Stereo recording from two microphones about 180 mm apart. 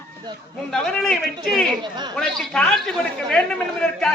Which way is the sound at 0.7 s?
5° left (ahead or behind).